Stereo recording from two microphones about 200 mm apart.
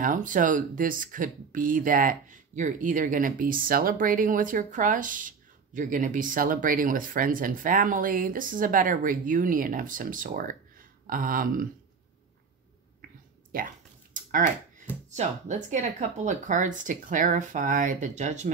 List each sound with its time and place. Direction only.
0.0 s speech: 40° right (ahead or behind)
13.5 s speech: 45° right (ahead or behind)
14.1 s a sound: 40° right (ahead or behind)
15.0 s speech: 35° right (ahead or behind)